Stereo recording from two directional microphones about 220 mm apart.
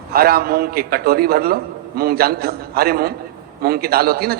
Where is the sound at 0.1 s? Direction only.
45° right (ahead or behind).